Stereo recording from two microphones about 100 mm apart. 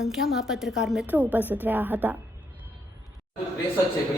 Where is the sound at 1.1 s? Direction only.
15° right (ahead or behind).